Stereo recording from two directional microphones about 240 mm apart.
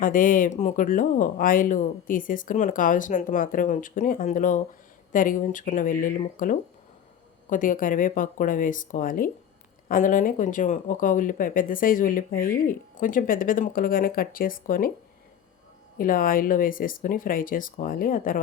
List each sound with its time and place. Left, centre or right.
0.0 s speech: left
16.0 s speech: left